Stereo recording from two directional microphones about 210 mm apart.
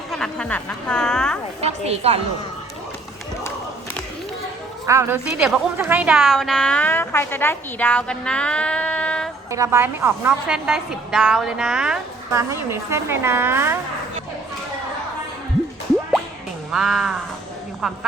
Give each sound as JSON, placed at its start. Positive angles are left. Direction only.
{"t": 0.1, "sound": "a woman's voice", "side_deg": 5}
{"t": 1.6, "sound": "a woman's voice", "side_deg": -30}
{"t": 4.9, "sound": "a woman's voice", "side_deg": -10}
{"t": 9.5, "sound": "a woman's voice", "side_deg": -15}
{"t": 16.7, "sound": "a woman's voice", "side_deg": 0}